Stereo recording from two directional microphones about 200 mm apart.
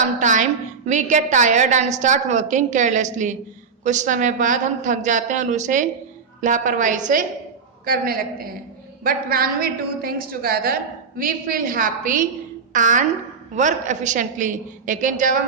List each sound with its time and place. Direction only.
0.2 s a woman's voice: 40° right (ahead or behind)